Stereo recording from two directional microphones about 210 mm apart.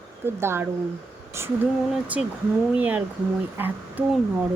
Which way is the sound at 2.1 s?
5° right (ahead or behind).